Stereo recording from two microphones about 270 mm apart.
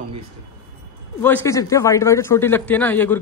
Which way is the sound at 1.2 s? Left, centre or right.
Centre.